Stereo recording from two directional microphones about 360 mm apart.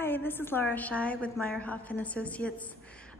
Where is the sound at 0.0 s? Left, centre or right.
Centre.